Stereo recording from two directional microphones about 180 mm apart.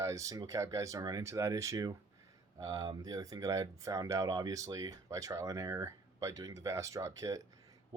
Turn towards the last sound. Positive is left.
turn(degrees=-20)  # may be behind; listen again after turning